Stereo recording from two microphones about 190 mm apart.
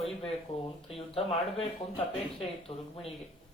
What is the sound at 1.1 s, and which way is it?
Speech, 30° left (ahead or behind).